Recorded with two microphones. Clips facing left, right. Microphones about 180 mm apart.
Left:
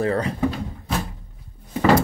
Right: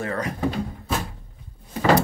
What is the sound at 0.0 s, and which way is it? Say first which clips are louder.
Speech: left 5 dB; 30° left (ahead or behind).